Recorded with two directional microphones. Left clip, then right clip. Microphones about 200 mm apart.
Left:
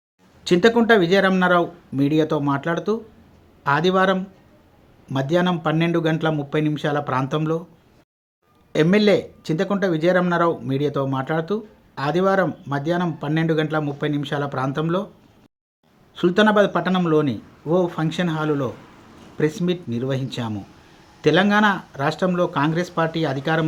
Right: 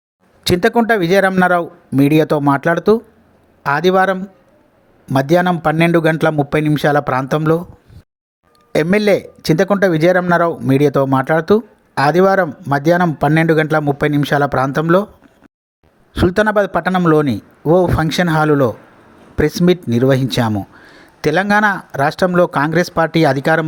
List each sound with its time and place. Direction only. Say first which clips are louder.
0.4 s speech: right 3 dB; 35° right (ahead or behind)
8.7 s speech: right 4 dB; 35° right (ahead or behind)
16.1 s speech: right 3 dB; 40° right (ahead or behind)